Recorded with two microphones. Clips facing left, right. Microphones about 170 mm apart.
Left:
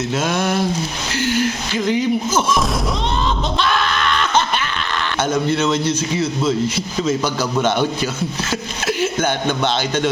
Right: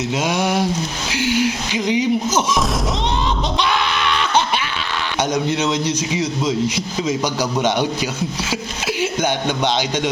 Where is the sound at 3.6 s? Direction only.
15° right (ahead or behind).